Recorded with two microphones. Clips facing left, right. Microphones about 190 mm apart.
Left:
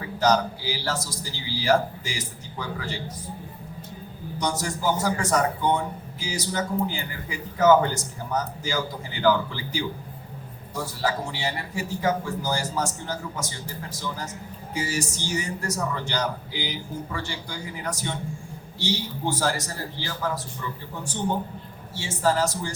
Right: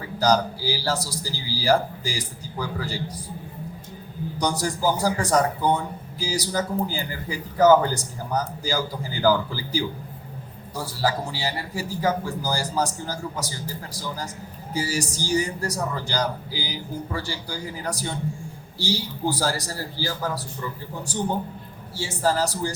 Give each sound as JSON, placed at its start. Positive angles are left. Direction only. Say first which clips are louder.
{"t": 0.2, "sound": "a man's voice", "louder": "right 1 dB", "side_deg": -35}
{"t": 4.6, "sound": "a man's voice", "louder": "right 3 dB", "side_deg": -35}
{"t": 14.7, "sound": "a man's voice", "louder": "right 2 dB", "side_deg": -35}
{"t": 21.9, "sound": "a man's voice", "louder": "even", "side_deg": -35}